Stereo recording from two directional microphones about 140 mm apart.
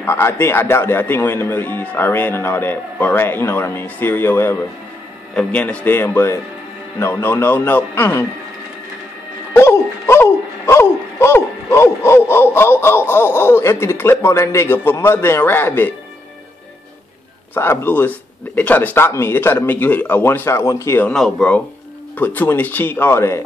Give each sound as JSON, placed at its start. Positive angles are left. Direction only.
{"t": 0.0, "sound": "speech", "side_deg": 15}
{"t": 9.5, "sound": "speech", "side_deg": 15}
{"t": 17.6, "sound": "speech", "side_deg": 15}
{"t": 21.1, "sound": "speech", "side_deg": 5}